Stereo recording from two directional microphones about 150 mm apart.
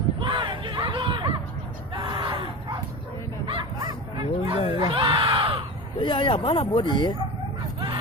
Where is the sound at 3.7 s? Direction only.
30° right (ahead or behind).